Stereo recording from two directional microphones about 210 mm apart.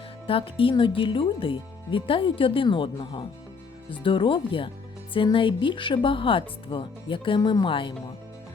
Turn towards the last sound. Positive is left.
turn(degrees=25)  # may be behind; listen again after turning